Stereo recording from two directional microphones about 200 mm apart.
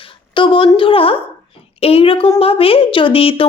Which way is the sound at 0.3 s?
25° left (ahead or behind).